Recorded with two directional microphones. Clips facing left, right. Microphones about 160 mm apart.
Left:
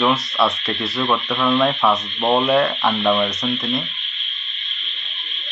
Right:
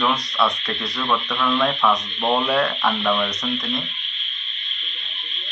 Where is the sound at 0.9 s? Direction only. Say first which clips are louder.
Left 2 dB; 20° left (ahead or behind).